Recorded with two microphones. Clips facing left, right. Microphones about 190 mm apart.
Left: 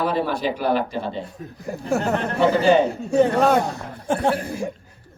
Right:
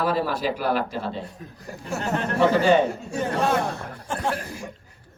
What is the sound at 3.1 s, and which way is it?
Speech, 60° left (ahead or behind).